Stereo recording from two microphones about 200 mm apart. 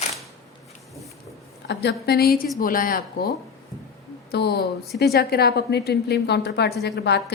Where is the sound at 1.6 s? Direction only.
55° left (ahead or behind).